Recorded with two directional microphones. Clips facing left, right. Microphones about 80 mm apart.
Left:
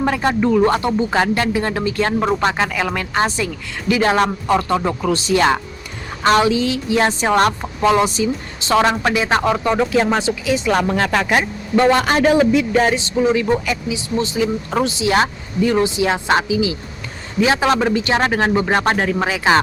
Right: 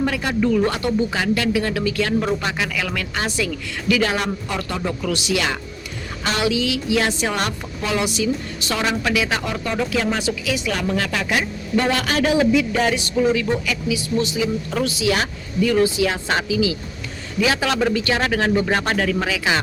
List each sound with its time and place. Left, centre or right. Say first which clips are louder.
0.0 s speech: left 3 dB; left
13.0 s speech: left 2 dB; left
14.3 s speech: left 3 dB; left
14.8 s speech: left 5 dB; left